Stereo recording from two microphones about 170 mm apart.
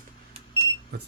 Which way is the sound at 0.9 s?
80° right.